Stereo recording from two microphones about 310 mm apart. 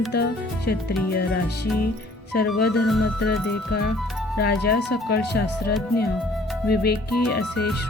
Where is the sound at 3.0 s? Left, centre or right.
Left.